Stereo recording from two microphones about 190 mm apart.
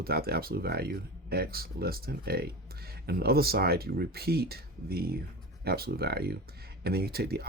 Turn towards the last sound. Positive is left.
turn(degrees=-55)  # may be behind; listen again after turning